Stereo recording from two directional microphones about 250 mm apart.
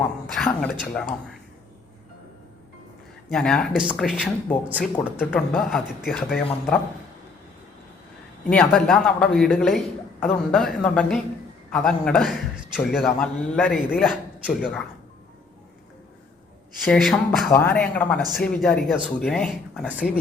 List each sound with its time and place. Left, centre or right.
0.3 s speech: centre
3.2 s a man's voice: centre
8.4 s a man's voice: centre
16.8 s a man's voice: centre